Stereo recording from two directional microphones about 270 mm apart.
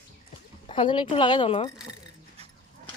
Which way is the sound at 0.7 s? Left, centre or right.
Centre.